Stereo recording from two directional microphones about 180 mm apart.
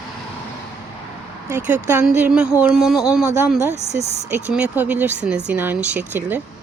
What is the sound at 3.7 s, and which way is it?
Speech, 40° right (ahead or behind).